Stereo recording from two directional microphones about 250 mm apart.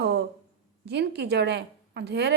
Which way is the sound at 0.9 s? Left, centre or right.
Right.